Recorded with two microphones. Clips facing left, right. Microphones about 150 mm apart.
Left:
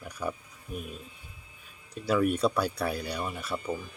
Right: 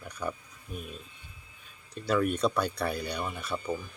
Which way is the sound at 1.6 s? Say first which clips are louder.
Left 1 dB; 5° left (ahead or behind).